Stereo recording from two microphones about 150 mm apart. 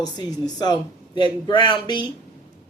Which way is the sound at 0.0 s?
25° left (ahead or behind).